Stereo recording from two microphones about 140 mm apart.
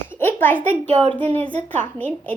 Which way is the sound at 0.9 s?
45° right (ahead or behind).